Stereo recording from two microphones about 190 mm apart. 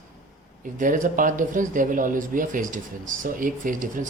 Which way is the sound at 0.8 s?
45° right (ahead or behind).